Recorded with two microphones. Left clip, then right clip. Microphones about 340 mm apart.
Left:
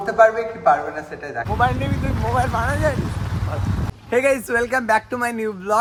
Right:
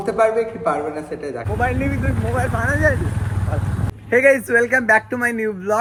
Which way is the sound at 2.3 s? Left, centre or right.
Centre.